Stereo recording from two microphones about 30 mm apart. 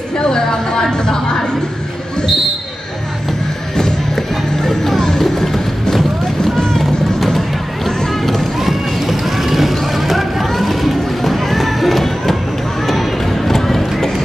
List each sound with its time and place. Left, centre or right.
0.9 s speech: left
4.6 s music: centre
5.2 s vehicle: centre
8.2 s music: centre
8.5 s vehicle: centre
12.8 s run: centre